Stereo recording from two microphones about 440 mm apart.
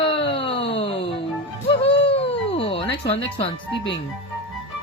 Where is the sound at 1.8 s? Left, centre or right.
Centre.